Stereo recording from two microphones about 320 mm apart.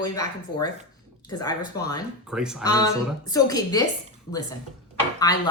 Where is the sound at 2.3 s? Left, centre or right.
Centre.